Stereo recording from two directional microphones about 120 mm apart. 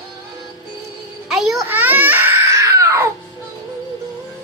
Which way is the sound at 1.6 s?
15° right (ahead or behind).